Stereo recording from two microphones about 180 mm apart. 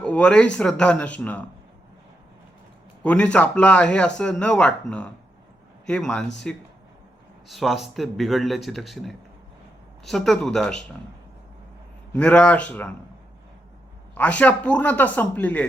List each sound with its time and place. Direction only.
0.0 s speech: 5° left (ahead or behind)
3.0 s a man's voice: 5° left (ahead or behind)
12.1 s speech: 5° left (ahead or behind)
14.2 s speech: 10° left (ahead or behind)